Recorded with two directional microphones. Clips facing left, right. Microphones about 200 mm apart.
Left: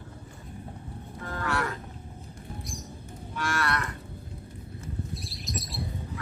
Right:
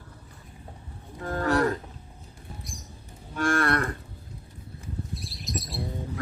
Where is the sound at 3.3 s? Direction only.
50° right (ahead or behind).